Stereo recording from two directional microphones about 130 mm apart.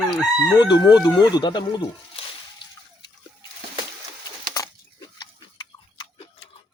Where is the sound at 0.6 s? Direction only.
35° left (ahead or behind).